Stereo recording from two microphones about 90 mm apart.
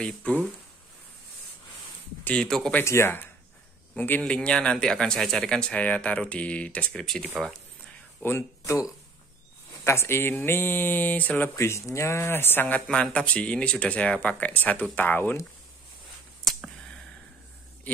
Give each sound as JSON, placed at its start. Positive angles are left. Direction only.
{"t": 0.0, "sound": "speech", "side_deg": 15}
{"t": 2.2, "sound": "speech", "side_deg": 10}
{"t": 2.8, "sound": "a man's voice", "side_deg": 30}
{"t": 4.2, "sound": "speech", "side_deg": 10}
{"t": 8.2, "sound": "speech", "side_deg": 25}
{"t": 9.8, "sound": "speech", "side_deg": 30}
{"t": 11.5, "sound": "speech", "side_deg": 35}
{"t": 12.8, "sound": "speech", "side_deg": 10}